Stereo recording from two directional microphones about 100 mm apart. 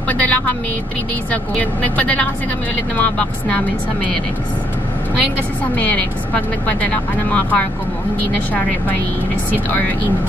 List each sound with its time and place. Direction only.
0.1 s vehicle: 15° left (ahead or behind)
1.3 s speech: 15° left (ahead or behind)
5.8 s speech: 15° left (ahead or behind)